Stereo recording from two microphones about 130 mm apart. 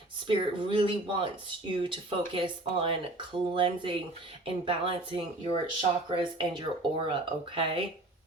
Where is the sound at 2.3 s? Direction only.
45° right (ahead or behind).